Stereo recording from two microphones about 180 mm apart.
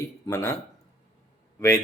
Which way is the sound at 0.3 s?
15° left (ahead or behind).